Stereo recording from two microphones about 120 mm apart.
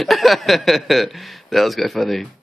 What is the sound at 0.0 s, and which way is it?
Speech, centre (ahead or behind).